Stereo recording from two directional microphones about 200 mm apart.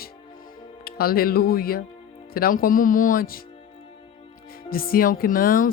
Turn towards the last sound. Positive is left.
turn(degrees=45)  # may be behind; listen again after turning